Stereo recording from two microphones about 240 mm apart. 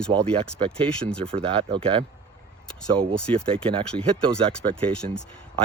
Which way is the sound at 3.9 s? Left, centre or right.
Centre.